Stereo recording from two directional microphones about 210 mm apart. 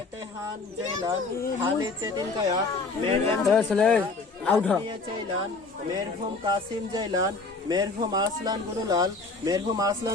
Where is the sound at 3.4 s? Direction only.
5° left (ahead or behind).